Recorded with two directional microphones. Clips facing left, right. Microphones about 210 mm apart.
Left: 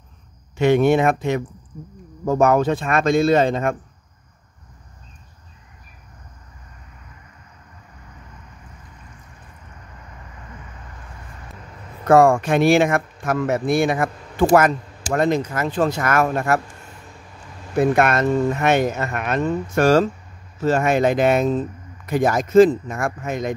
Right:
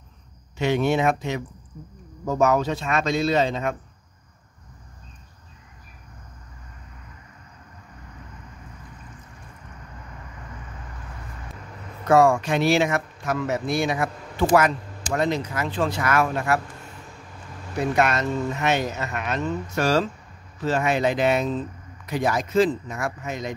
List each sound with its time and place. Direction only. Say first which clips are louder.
0.6 s speech: left 6 dB; 55° left (ahead or behind)
12.1 s speech: left 4 dB; 50° left (ahead or behind)
17.7 s speech: left 5 dB; 55° left (ahead or behind)